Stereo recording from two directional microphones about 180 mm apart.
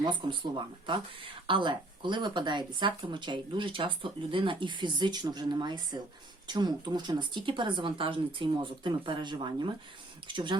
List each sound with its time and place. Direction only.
0.0 s speech: 25° right (ahead or behind)